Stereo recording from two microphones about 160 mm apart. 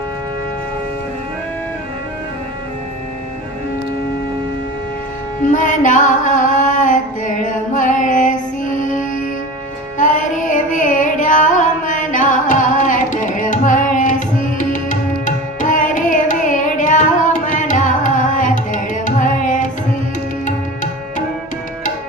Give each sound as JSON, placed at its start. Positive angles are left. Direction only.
{"t": 5.4, "sound": "music", "side_deg": 50}
{"t": 10.0, "sound": "carnatic music", "side_deg": 50}